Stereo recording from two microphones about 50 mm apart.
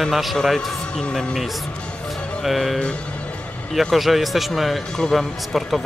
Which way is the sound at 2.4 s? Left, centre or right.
Centre.